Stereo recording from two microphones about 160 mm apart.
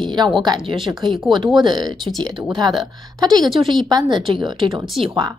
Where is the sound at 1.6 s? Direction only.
30° right (ahead or behind).